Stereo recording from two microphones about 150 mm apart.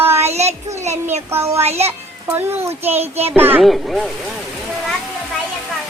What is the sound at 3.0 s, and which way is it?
Child singing, 45° right (ahead or behind).